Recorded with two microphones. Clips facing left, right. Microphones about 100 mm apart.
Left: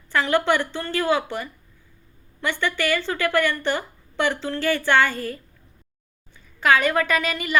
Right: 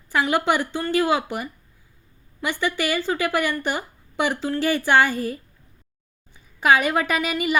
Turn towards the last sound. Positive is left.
turn(degrees=-10)  # may be behind; listen again after turning